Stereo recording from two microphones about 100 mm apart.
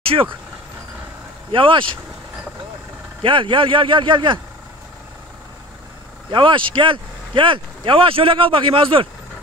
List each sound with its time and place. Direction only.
0.0 s speech: 70° right (ahead or behind)
1.5 s speech: 60° right (ahead or behind)
3.2 s speech: 55° right (ahead or behind)
6.3 s speech: 55° right (ahead or behind)